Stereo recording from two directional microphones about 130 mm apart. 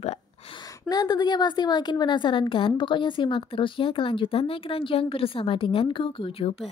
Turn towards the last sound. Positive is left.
turn(degrees=45)  # may be behind; listen again after turning